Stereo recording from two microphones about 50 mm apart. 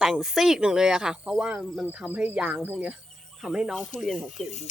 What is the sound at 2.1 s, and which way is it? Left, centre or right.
Speech, right.